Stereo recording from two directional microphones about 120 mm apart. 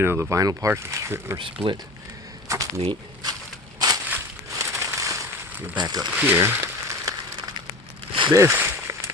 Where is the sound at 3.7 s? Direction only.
30° right (ahead or behind).